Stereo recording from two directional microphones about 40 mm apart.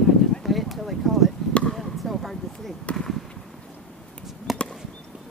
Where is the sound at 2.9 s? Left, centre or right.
Left.